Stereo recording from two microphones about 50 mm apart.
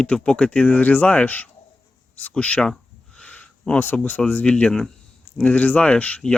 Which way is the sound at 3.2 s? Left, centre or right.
Left.